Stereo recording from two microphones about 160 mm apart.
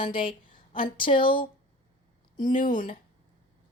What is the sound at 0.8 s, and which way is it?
Speech, 30° left (ahead or behind).